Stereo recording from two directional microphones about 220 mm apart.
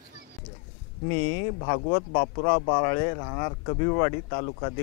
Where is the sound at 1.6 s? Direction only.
25° left (ahead or behind).